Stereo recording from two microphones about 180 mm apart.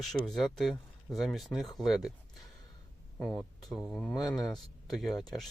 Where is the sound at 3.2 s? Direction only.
5° left (ahead or behind).